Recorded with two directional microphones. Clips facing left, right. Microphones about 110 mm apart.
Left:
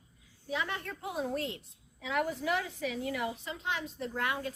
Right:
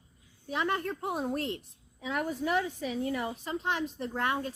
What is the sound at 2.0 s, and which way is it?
Speech, 35° right (ahead or behind).